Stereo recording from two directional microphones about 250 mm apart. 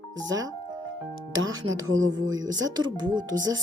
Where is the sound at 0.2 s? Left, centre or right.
Centre.